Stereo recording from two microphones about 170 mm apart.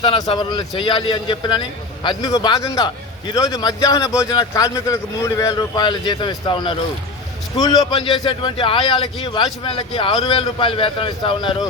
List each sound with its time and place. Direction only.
0.0 s a man's voice: 25° left (ahead or behind)